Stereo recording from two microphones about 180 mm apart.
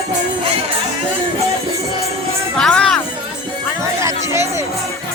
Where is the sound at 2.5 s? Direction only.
5° left (ahead or behind).